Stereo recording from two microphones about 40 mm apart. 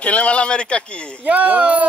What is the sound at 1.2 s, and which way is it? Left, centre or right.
Speech, right.